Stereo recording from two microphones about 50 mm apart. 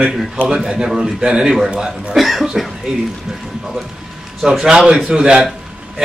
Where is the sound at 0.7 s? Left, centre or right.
Centre.